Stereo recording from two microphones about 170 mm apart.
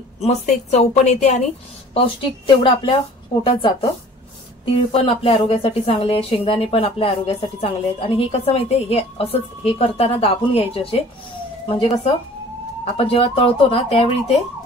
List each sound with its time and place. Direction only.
0.2 s speech: 40° left (ahead or behind)
2.0 s a woman's voice: 30° left (ahead or behind)
4.9 s speech: 35° left (ahead or behind)